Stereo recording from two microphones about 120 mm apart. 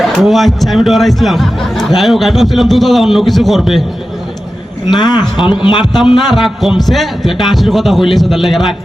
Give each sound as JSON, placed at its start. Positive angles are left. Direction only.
{"t": 0.0, "sound": "speech", "side_deg": 0}
{"t": 4.9, "sound": "speech", "side_deg": 35}
{"t": 5.4, "sound": "speech", "side_deg": -5}